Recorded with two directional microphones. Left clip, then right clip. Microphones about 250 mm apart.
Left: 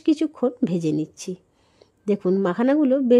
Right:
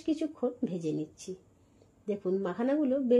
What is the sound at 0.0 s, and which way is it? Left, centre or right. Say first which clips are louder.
Speech: left 10 dB; left.